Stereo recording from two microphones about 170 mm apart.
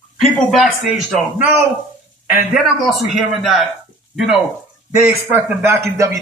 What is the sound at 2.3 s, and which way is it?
A man's voice, 5° right (ahead or behind).